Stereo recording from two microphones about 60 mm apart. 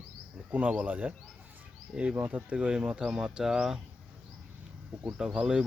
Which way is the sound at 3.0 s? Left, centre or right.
Centre.